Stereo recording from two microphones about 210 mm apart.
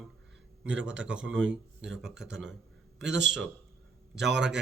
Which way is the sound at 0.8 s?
60° right (ahead or behind).